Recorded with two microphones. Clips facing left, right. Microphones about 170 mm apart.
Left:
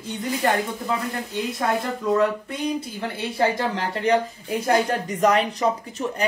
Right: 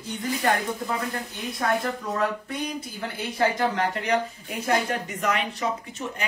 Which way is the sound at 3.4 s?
30° left (ahead or behind).